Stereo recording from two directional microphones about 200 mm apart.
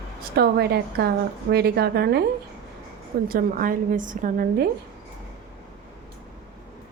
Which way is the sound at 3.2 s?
45° right (ahead or behind).